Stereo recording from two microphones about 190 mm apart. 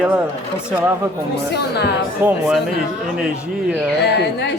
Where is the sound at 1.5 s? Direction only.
60° left (ahead or behind).